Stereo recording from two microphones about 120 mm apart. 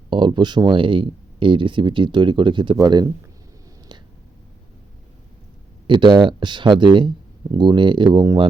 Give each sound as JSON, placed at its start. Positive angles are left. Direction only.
{"t": 0.1, "sound": "speech", "side_deg": -40}
{"t": 3.9, "sound": "a sound", "side_deg": -35}
{"t": 5.9, "sound": "speech", "side_deg": -40}